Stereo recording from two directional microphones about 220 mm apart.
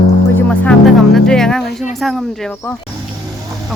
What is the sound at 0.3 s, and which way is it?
Music, 5° left (ahead or behind).